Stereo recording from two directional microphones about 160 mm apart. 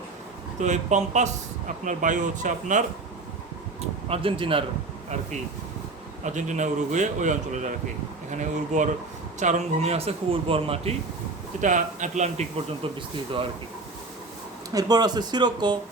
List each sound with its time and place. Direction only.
0.6 s speech: 45° right (ahead or behind)
4.1 s speech: 35° right (ahead or behind)
6.2 s speech: 50° right (ahead or behind)
11.6 s speech: 50° right (ahead or behind)
14.7 s speech: 25° right (ahead or behind)